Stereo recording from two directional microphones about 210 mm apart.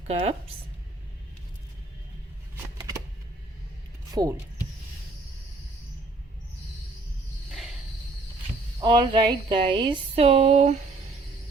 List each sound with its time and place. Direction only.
0.1 s speech: 30° right (ahead or behind)
4.1 s speech: 20° right (ahead or behind)
8.8 s speech: 20° right (ahead or behind)